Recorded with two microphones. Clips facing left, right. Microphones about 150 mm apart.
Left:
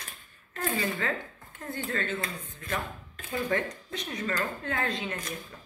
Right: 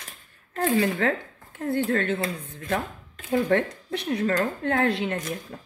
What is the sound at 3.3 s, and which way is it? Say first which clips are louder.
Speech: right 7 dB; 65° right (ahead or behind).